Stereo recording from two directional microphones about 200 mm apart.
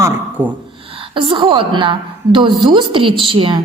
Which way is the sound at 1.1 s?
25° right (ahead or behind).